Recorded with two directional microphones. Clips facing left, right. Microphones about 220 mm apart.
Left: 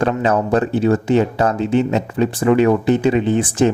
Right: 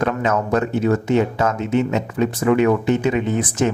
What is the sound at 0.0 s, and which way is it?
Speech, 30° left (ahead or behind).